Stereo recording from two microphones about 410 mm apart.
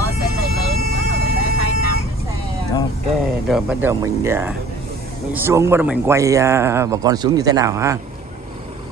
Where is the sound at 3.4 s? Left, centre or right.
Centre.